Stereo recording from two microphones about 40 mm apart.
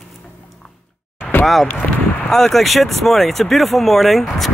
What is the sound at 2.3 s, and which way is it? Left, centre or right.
Speech, centre.